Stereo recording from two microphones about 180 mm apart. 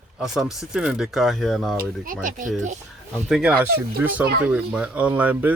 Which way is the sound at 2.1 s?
45° right (ahead or behind).